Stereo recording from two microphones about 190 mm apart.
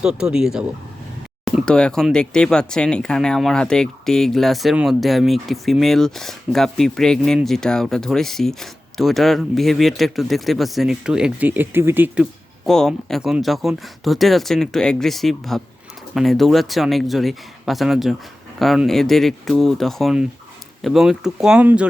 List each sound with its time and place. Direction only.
0.0 s speech: 5° right (ahead or behind)